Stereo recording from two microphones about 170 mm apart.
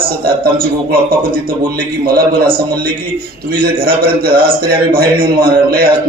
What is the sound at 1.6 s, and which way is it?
Speech, 60° right (ahead or behind).